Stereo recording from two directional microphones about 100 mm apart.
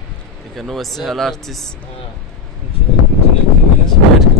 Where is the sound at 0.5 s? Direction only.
Centre (ahead or behind).